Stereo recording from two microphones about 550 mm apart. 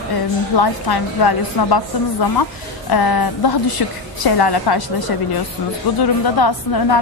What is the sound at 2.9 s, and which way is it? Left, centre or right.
A woman's voice, left.